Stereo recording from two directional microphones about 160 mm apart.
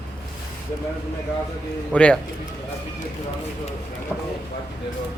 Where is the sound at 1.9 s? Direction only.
5° left (ahead or behind).